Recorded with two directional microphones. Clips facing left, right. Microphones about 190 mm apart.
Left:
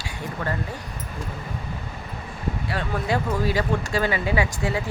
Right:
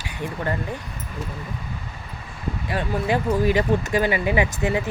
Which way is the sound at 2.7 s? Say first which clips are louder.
Right 3 dB; 15° right (ahead or behind).